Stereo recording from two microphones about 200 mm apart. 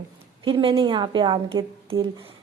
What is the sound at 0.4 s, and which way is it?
A woman's voice, 25° right (ahead or behind).